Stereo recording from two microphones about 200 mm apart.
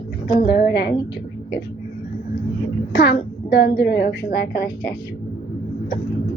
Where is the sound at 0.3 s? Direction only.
50° left (ahead or behind).